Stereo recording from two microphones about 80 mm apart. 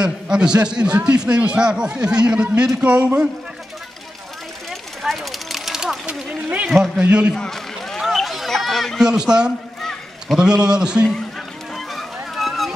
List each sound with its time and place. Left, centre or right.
0.0 s speech: centre
4.6 s a sound: centre
7.0 s speech: centre
7.3 s run: centre
8.0 s a sound: centre
9.0 s speech: centre
11.7 s run: centre